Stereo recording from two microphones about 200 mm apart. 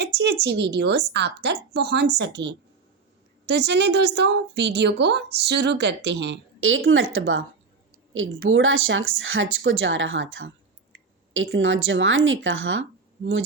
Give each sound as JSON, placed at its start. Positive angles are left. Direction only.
{"t": 0.0, "sound": "a woman's voice", "side_deg": -60}